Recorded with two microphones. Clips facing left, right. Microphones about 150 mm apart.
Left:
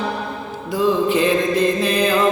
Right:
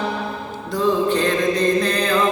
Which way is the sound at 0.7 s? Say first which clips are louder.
Left 1 dB; 10° left (ahead or behind).